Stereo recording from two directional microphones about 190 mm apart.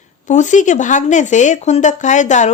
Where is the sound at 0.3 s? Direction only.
40° left (ahead or behind).